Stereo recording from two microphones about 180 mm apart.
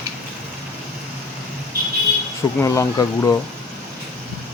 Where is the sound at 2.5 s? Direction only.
15° left (ahead or behind).